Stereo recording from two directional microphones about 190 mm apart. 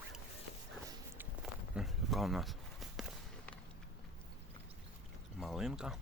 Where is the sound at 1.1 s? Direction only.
Centre (ahead or behind).